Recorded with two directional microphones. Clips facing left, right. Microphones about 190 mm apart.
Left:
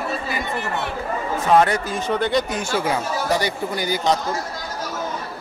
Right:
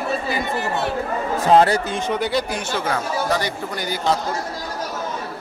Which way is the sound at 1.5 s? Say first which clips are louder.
Right 2 dB; 30° right (ahead or behind).